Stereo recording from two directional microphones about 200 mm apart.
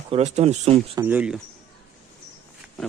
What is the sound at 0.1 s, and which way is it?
Speech, 35° right (ahead or behind).